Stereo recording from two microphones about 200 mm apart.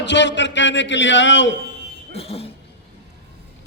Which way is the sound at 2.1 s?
30° left (ahead or behind).